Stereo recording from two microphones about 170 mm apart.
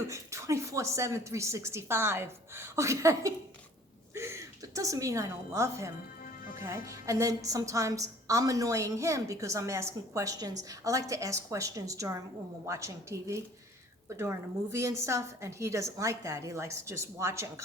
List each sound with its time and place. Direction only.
0.1 s a woman's voice: 15° right (ahead or behind)
6.2 s music: 55° left (ahead or behind)
6.6 s a woman's voice: 15° right (ahead or behind)